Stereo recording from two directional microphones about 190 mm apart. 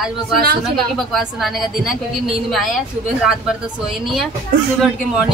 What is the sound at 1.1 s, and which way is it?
A woman's voice, centre (ahead or behind).